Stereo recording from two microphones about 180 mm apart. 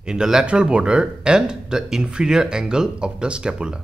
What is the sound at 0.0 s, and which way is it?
Speech, 5° right (ahead or behind).